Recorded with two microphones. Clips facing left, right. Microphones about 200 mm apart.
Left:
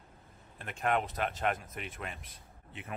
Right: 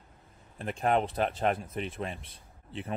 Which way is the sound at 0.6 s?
30° right (ahead or behind).